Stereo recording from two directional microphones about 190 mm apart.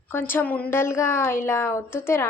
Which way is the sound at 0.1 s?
10° left (ahead or behind).